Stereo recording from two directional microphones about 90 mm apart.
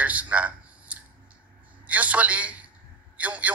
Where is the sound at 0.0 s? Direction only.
15° right (ahead or behind).